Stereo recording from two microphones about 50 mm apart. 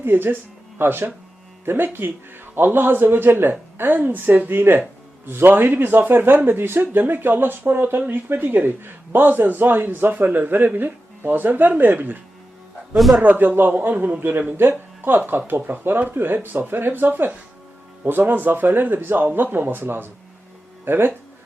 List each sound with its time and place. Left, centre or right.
0.0 s a woman's voice: right
13.2 s a woman's voice: right